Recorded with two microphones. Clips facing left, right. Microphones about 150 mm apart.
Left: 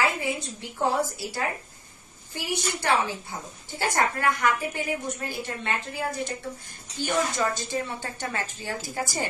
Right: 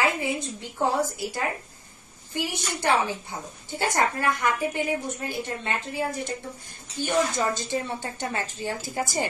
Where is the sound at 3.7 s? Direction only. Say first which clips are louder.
Right 1 dB; 20° right (ahead or behind).